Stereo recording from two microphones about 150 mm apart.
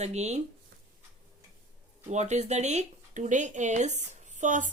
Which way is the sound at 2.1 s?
50° right (ahead or behind).